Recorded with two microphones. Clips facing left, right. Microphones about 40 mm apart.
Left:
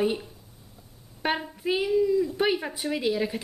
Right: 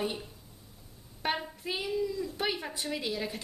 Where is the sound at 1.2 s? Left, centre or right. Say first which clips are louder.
Left 6 dB; centre.